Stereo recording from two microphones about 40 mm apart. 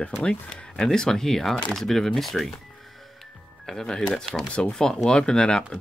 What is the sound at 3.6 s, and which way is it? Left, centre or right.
Speech, centre.